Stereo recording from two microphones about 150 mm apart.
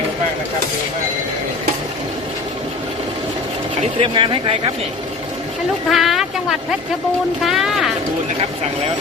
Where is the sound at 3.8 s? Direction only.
35° right (ahead or behind).